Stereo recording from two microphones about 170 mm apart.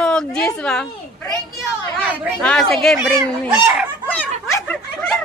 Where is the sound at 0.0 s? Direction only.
5° left (ahead or behind).